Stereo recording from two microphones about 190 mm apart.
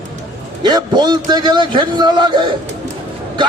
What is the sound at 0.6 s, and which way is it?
A man's voice, 20° right (ahead or behind).